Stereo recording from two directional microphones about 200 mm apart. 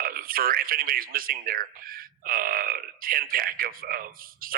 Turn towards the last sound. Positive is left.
turn(degrees=-45)  # may be behind; listen again after turning